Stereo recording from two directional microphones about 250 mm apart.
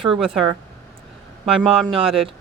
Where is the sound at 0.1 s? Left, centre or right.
Centre.